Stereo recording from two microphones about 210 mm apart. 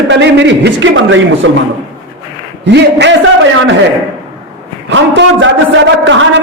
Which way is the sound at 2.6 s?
55° right (ahead or behind).